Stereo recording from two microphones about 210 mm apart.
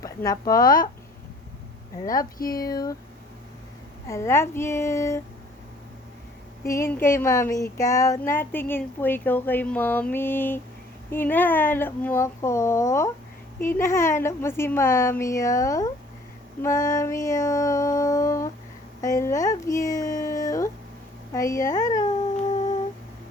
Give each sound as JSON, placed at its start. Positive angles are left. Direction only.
{"t": 0.0, "sound": "speech", "side_deg": 15}
{"t": 0.6, "sound": "speech", "side_deg": 40}
{"t": 2.0, "sound": "speech", "side_deg": 40}
{"t": 4.0, "sound": "a woman's voice", "side_deg": 15}
{"t": 6.7, "sound": "a woman's voice", "side_deg": 10}